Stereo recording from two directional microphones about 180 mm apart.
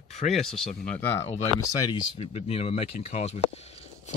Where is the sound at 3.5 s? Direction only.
35° left (ahead or behind).